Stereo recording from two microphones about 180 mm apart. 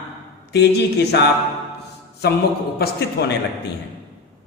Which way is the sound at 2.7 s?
65° left (ahead or behind).